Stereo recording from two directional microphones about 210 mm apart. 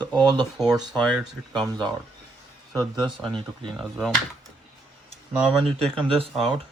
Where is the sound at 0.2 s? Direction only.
20° right (ahead or behind).